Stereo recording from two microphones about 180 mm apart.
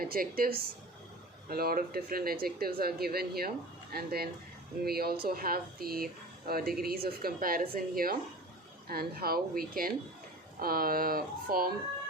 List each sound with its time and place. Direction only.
0.0 s speech: 55° right (ahead or behind)